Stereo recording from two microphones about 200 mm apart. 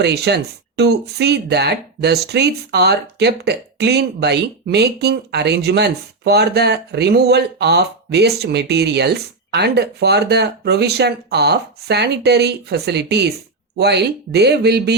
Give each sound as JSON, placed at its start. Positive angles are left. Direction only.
{"t": 0.0, "sound": "speech", "side_deg": -55}